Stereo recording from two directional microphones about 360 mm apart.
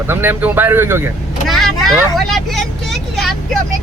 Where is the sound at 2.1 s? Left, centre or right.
Centre.